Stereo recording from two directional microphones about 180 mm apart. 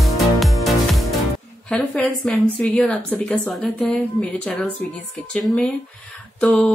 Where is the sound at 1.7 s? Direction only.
5° left (ahead or behind).